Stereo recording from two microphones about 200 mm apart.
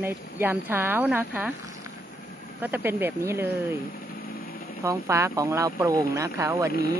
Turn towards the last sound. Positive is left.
turn(degrees=-15)  # may be behind; listen again after turning